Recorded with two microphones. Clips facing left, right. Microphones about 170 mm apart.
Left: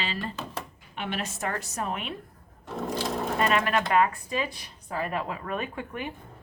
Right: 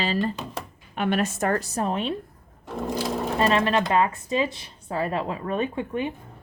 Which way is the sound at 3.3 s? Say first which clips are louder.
Right 4 dB; 30° right (ahead or behind).